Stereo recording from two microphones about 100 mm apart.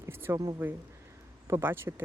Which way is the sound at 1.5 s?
25° right (ahead or behind).